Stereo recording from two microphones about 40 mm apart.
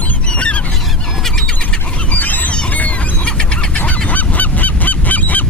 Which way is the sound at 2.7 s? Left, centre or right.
Left.